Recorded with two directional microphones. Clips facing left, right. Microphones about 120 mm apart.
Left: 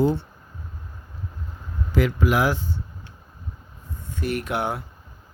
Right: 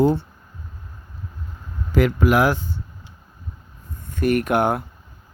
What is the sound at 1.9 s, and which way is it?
Speech, 55° right (ahead or behind).